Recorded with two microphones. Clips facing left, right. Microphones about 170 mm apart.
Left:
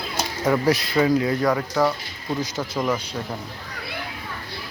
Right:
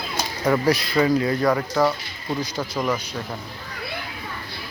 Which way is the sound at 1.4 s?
5° right (ahead or behind).